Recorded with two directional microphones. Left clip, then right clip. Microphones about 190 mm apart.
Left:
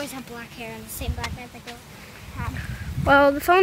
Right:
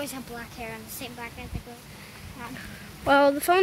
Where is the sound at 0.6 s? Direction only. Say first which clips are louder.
Left 3 dB; 50° left (ahead or behind).